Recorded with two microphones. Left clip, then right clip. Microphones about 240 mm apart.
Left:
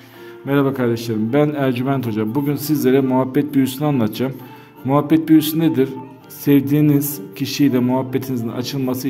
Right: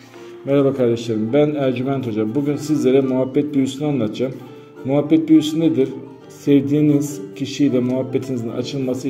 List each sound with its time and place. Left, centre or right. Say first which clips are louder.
0.5 s a man's voice: right 2 dB; left